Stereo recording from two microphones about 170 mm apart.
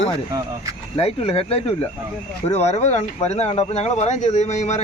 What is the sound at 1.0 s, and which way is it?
Speech, 35° left (ahead or behind).